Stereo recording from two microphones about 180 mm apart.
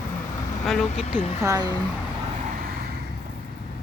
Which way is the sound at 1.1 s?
40° left (ahead or behind).